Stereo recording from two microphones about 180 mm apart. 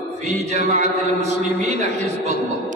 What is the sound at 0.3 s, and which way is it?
Mantra, 40° right (ahead or behind).